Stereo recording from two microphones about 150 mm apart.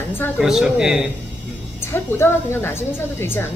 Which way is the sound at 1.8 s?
15° left (ahead or behind).